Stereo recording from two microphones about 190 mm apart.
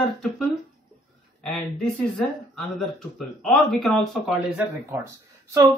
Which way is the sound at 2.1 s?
Centre (ahead or behind).